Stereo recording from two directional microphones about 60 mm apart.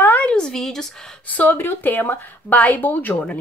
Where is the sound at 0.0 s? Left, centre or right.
Left.